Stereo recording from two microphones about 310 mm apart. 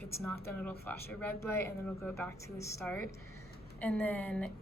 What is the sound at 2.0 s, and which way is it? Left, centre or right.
A woman's voice, centre.